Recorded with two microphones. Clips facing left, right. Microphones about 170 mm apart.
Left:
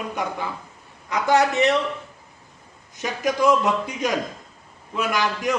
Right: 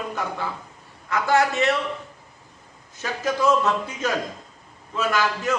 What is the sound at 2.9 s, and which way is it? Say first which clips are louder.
A man's voice: left 2 dB; 15° left (ahead or behind).